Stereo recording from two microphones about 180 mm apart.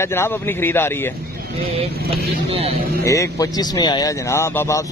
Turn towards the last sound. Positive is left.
turn(degrees=15)  # may be behind; listen again after turning